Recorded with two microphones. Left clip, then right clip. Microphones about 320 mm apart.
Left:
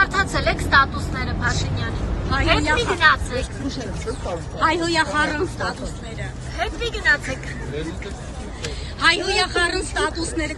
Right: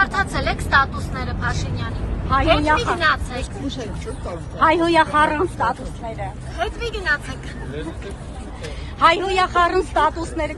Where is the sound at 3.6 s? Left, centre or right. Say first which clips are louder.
Left 1 dB; right.